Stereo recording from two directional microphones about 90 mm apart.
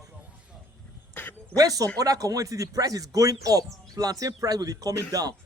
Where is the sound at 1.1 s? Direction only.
20° left (ahead or behind).